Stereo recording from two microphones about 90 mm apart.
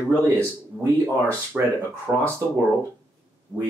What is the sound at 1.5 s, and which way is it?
Speech, 20° right (ahead or behind).